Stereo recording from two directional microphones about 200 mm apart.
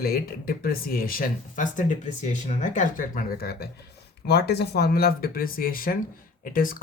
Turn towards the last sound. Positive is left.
turn(degrees=45)  # may be behind; listen again after turning